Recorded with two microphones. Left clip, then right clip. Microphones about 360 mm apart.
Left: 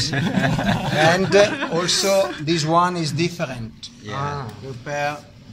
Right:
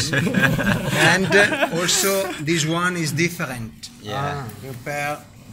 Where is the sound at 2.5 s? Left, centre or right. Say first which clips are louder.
Left 2 dB; centre.